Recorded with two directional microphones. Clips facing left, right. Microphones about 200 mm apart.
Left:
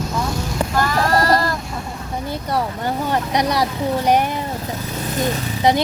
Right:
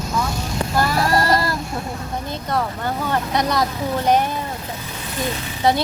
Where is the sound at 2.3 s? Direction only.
10° left (ahead or behind).